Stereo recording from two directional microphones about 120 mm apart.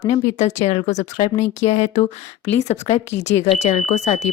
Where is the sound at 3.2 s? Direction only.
70° left (ahead or behind).